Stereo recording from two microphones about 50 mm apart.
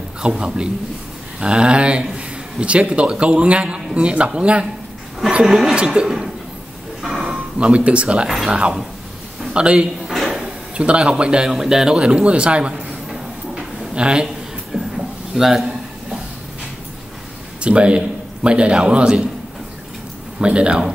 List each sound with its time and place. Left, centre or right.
0.2 s speech: centre
5.4 s speech: centre
5.9 s a sound: centre
7.3 s speech: right
10.0 s drawer open or close: centre
10.8 s speech: right
13.1 s a sound: centre
15.3 s speech: centre
17.6 s a man's voice: right
20.3 s speech: right